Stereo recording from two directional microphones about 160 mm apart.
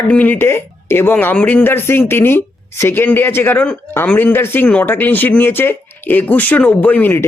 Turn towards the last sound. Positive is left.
turn(degrees=10)  # may be behind; listen again after turning